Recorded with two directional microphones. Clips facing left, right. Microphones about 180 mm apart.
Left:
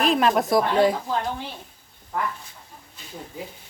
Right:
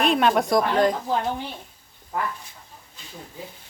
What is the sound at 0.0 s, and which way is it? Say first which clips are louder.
Speech: even; centre (ahead or behind).